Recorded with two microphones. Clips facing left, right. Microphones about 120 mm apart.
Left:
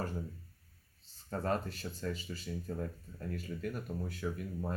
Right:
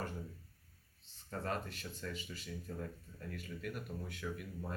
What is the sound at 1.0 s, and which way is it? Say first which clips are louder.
Speech: left 5 dB; 35° left (ahead or behind).